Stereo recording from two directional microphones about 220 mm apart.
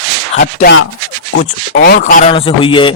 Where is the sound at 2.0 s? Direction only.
30° left (ahead or behind).